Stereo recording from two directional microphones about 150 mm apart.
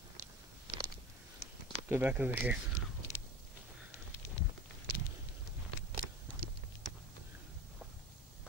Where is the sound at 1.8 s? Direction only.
10° right (ahead or behind).